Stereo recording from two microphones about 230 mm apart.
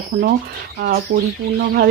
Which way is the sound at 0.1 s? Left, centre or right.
Right.